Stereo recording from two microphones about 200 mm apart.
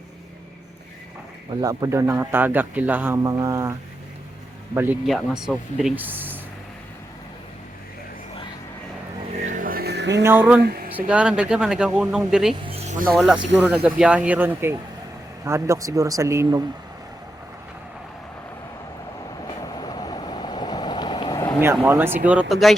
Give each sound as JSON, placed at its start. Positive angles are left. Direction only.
{"t": 1.6, "sound": "speech", "side_deg": -15}
{"t": 9.4, "sound": "vehicle", "side_deg": -40}
{"t": 10.2, "sound": "speech", "side_deg": -10}
{"t": 12.6, "sound": "a sound", "side_deg": -30}
{"t": 13.1, "sound": "speech", "side_deg": 0}
{"t": 19.5, "sound": "vehicle", "side_deg": 20}
{"t": 21.6, "sound": "speech", "side_deg": -10}